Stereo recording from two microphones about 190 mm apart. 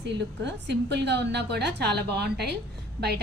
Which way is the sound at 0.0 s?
65° right (ahead or behind).